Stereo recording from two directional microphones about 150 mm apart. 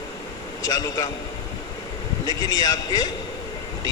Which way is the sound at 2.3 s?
25° left (ahead or behind).